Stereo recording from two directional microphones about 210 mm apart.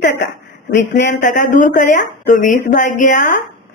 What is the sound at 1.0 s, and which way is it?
Speech, 35° left (ahead or behind).